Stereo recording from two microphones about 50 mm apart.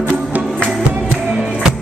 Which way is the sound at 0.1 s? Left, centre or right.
Right.